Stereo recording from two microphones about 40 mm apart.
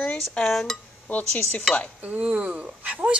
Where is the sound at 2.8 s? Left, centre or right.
Right.